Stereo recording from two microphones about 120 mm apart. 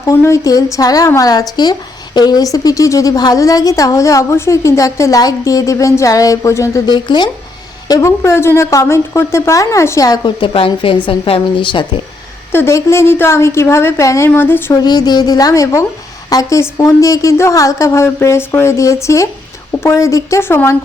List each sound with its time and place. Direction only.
0.0 s a woman's voice: 25° left (ahead or behind)
7.9 s a woman's voice: 25° left (ahead or behind); by 11.9 s 40° left (ahead or behind)
12.5 s a woman's voice: 20° left (ahead or behind)
14.8 s a woman's voice: 35° left (ahead or behind); by 20.7 s 20° left (ahead or behind)